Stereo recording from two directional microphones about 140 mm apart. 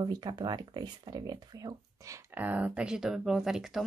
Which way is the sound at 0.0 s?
30° right (ahead or behind).